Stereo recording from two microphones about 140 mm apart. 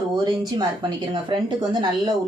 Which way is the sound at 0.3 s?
35° right (ahead or behind).